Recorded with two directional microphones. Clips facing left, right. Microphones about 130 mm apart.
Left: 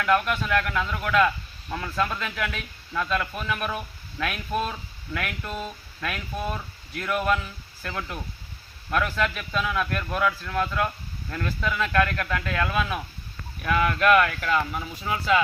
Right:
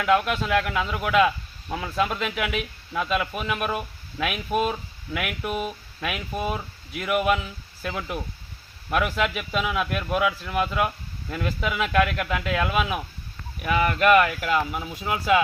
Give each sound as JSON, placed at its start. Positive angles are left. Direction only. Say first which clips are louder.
{"t": 0.0, "sound": "speech", "louder": "right 2 dB", "side_deg": -20}